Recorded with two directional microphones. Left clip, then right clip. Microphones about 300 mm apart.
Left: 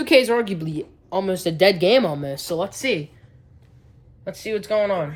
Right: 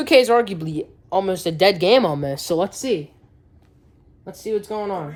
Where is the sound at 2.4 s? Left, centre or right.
Right.